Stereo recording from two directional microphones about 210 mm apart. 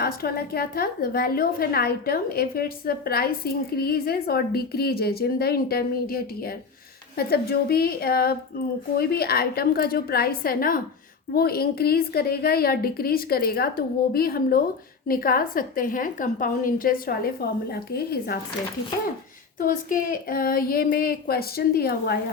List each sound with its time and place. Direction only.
0.0 s a woman's voice: 45° left (ahead or behind)
19.5 s a woman's voice: 40° left (ahead or behind)